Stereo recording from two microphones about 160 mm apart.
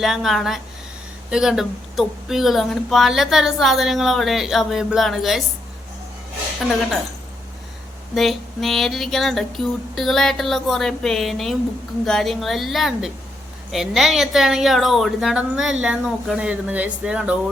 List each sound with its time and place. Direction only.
0.0 s speech: centre (ahead or behind)
8.1 s speech: centre (ahead or behind)